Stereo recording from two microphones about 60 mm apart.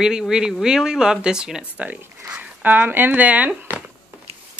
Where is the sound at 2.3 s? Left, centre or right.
Right.